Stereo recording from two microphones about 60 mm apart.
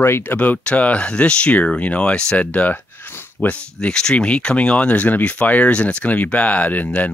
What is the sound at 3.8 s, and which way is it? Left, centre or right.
Speech, centre.